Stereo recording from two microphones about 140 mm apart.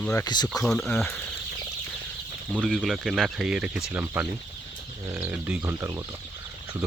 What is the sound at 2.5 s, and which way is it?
Speech, 5° left (ahead or behind).